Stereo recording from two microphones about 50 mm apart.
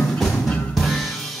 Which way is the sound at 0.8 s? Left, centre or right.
Centre.